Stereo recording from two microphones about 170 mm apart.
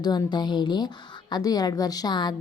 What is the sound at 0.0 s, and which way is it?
A woman's voice, 25° left (ahead or behind).